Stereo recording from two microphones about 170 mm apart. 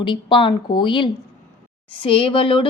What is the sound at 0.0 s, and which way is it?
Speech, 30° left (ahead or behind).